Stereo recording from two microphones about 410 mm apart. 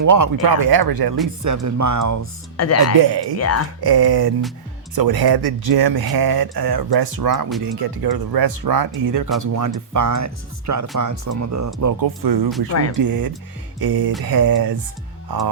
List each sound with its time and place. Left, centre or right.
0.0 s speech: right
1.5 s speech: right
2.6 s speech: left
3.0 s speech: right
3.3 s speech: left
3.8 s speech: right
12.0 s speech: right